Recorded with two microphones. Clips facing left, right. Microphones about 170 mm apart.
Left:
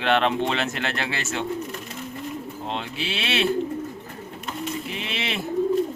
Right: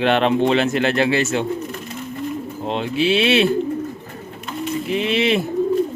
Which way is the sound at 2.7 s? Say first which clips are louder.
Right 12 dB; 10° right (ahead or behind).